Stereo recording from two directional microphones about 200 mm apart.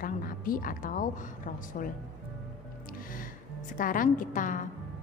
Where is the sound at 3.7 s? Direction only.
40° left (ahead or behind).